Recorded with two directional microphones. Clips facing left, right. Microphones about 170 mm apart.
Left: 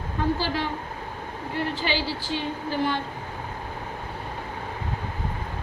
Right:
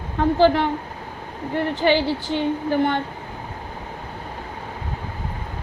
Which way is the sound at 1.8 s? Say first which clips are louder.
Right 9 dB; 55° right (ahead or behind).